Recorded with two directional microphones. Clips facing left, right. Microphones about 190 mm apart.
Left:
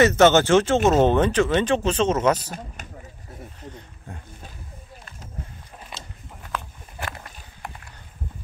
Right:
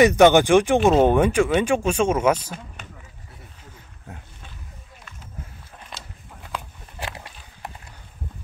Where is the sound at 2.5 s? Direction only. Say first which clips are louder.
Left 1 dB; 40° left (ahead or behind).